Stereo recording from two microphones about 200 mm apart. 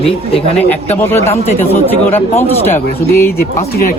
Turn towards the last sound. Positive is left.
turn(degrees=10)  # may be behind; listen again after turning